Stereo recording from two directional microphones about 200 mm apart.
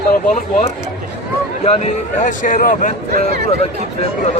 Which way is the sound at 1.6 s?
30° left (ahead or behind).